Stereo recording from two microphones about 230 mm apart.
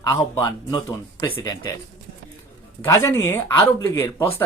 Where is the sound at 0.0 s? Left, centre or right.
Centre.